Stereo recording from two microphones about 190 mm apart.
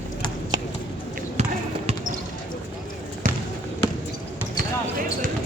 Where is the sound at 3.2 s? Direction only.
45° right (ahead or behind).